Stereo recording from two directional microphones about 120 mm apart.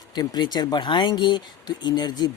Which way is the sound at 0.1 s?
35° left (ahead or behind).